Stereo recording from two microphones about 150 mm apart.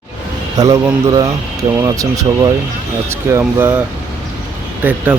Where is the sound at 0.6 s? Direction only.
25° right (ahead or behind).